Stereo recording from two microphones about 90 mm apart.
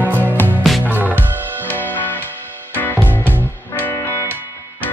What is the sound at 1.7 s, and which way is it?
Music, 20° left (ahead or behind).